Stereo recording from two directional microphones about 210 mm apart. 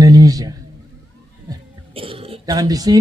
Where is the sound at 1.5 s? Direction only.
25° right (ahead or behind).